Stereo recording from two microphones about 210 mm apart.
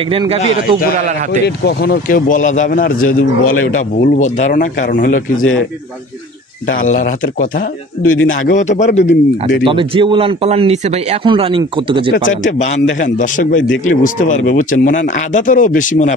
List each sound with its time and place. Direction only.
0.1 s speech: 25° right (ahead or behind)
0.9 s a man's voice: 35° right (ahead or behind)
1.7 s a man's voice: 45° left (ahead or behind)
6.9 s a man's voice: 40° left (ahead or behind)
8.0 s a man's voice: 75° left (ahead or behind)
8.5 s a man's voice: 35° left (ahead or behind)
9.7 s speech: 25° right (ahead or behind)
12.1 s a man's voice: 35° left (ahead or behind)